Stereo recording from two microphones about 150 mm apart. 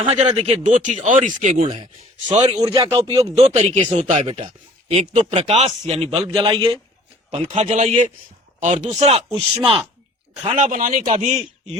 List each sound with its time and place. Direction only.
0.0 s speech: 45° right (ahead or behind)
2.6 s a man's voice: 30° right (ahead or behind)
7.3 s speech: 45° right (ahead or behind)
10.4 s speech: 55° right (ahead or behind)